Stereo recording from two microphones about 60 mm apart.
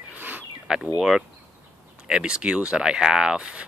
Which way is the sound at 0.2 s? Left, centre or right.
Right.